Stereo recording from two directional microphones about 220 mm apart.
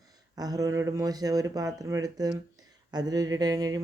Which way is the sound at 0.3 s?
15° right (ahead or behind).